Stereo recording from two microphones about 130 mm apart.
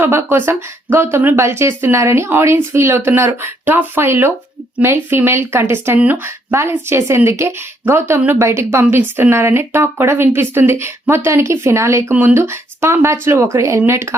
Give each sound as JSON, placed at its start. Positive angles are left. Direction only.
{"t": 0.0, "sound": "speech", "side_deg": -15}